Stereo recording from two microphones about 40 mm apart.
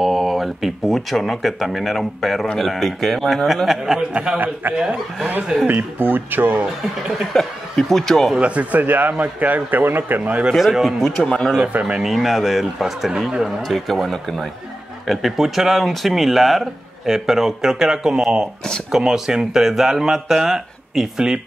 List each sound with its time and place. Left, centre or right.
0.0 s a man's voice: centre
3.6 s a man's voice: centre
5.7 s speech: right
7.3 s speech: centre
8.4 s speech: right
9.8 s speech: right
10.6 s a man's voice: centre
11.1 s speech: centre
12.0 s a man's voice: centre